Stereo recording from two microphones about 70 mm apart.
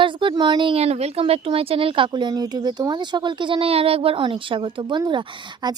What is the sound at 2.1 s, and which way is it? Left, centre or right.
Speech, right.